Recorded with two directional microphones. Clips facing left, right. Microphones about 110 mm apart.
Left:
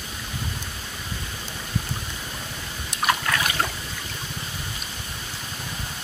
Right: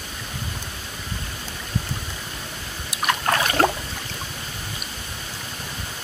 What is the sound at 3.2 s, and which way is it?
Boat, 40° right (ahead or behind).